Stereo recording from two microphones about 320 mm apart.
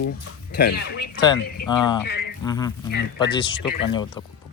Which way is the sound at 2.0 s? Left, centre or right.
Left.